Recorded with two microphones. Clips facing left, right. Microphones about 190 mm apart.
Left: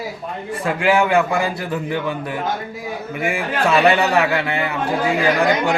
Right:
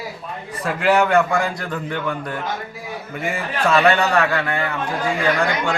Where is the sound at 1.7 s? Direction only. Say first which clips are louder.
Left 2 dB; 20° left (ahead or behind).